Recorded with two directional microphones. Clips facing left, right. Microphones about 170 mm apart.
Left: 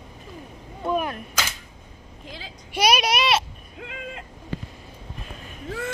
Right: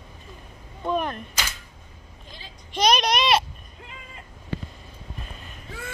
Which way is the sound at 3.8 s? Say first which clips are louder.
Left 10 dB; 90° left.